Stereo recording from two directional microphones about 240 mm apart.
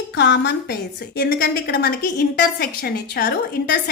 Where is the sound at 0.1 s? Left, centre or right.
Left.